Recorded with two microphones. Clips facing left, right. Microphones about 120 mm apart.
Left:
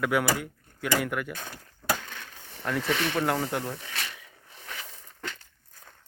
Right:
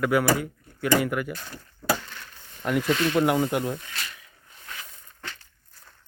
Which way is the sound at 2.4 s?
85° left.